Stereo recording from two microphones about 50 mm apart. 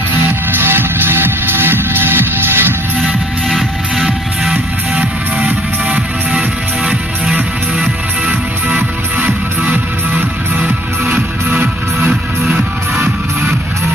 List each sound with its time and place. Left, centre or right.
0.3 s music: right
3.4 s music: centre
4.5 s music: right
9.2 s music: right